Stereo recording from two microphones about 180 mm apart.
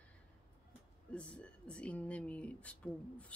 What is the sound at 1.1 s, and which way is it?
A woman's voice, 5° left (ahead or behind).